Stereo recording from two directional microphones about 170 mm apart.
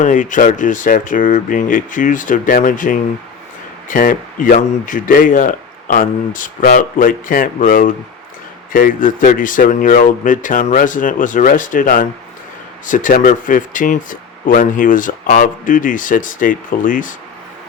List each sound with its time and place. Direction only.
0.0 s speech: 50° left (ahead or behind)